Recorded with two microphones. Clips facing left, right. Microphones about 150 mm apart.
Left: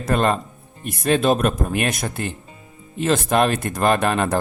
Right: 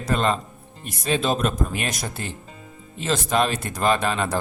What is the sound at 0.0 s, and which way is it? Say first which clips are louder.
Speech: left 3 dB; 55° left (ahead or behind).